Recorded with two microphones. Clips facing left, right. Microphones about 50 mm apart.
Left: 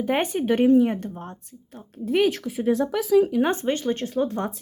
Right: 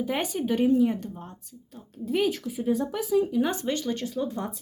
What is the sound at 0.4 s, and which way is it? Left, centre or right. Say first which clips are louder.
A woman's voice: left 4 dB; left.